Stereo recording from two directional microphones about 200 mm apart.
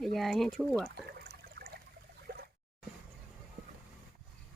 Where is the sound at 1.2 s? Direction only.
55° right (ahead or behind).